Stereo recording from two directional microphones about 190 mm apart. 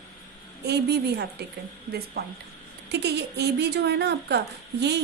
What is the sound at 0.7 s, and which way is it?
Speech, 60° right (ahead or behind).